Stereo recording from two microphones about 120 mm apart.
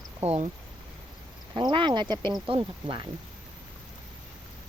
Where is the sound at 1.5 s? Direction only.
40° right (ahead or behind).